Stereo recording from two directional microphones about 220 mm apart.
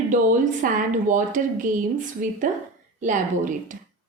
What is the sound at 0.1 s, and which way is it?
A woman's voice, 35° right (ahead or behind).